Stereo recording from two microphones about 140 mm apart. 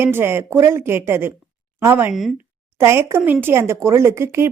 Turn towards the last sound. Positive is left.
turn(degrees=-20)  # may be behind; listen again after turning